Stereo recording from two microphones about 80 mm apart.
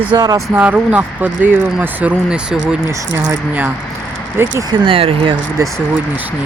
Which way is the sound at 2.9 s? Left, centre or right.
Right.